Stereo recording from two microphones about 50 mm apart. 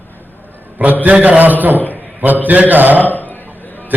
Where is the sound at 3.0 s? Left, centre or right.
Left.